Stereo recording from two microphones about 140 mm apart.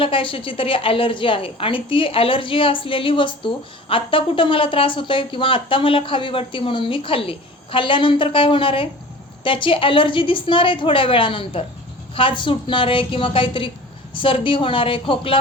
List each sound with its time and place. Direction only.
0.0 s a woman's voice: 40° left (ahead or behind)